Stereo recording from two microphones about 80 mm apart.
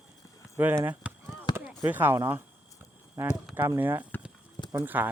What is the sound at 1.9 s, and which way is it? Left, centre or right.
Speech, right.